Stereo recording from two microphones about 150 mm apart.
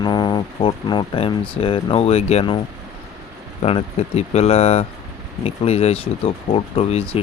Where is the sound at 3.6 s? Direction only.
40° left (ahead or behind).